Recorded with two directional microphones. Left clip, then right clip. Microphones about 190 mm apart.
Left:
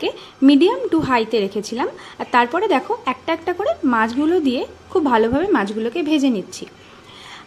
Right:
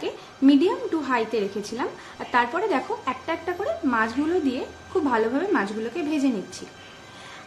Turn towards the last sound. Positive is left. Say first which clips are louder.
# left 6 dB
turn(degrees=40)  # may be behind; listen again after turning